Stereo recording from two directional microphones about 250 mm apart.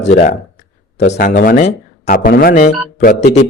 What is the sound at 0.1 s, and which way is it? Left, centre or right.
A man's voice, left.